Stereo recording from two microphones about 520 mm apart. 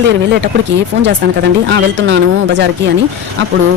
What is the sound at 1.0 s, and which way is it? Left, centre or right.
Speech, centre.